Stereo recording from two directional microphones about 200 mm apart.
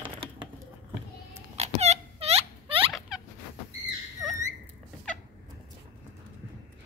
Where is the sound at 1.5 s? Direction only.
30° right (ahead or behind).